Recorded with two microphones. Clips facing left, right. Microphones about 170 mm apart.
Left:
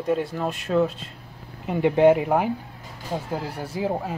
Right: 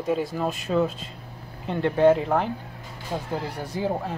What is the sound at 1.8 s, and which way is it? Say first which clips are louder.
Speech: left 2 dB; 15° left (ahead or behind).